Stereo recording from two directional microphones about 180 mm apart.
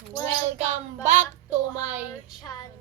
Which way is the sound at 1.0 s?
45° right (ahead or behind).